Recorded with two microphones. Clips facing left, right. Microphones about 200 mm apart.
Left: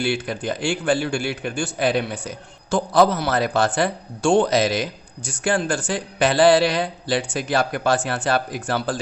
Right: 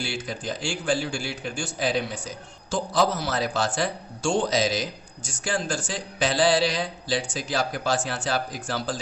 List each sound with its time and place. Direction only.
0.0 s a man's voice: 60° left (ahead or behind)